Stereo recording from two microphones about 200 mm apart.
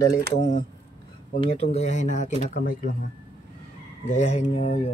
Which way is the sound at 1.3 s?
30° left (ahead or behind).